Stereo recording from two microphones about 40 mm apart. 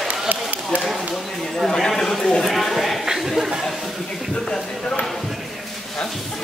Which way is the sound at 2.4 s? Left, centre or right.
Centre.